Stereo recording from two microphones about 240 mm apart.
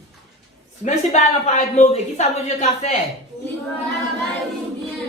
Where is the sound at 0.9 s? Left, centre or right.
Left.